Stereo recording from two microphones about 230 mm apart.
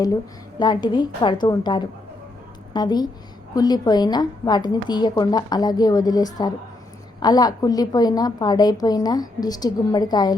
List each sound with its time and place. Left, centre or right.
0.6 s a woman's voice: centre